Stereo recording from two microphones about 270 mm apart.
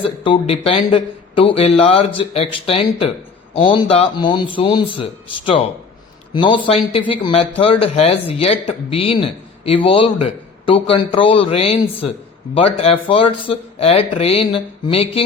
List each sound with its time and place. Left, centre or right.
0.0 s speech: left
6.3 s speech: centre